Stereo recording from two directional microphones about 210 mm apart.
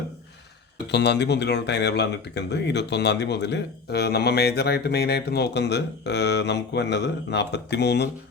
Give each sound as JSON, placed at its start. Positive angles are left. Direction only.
{"t": 0.9, "sound": "speech", "side_deg": 55}